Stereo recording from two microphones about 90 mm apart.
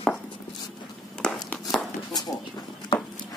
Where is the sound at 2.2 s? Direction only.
45° left (ahead or behind).